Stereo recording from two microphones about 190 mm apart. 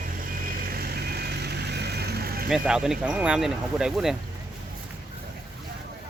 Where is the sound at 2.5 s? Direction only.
5° right (ahead or behind).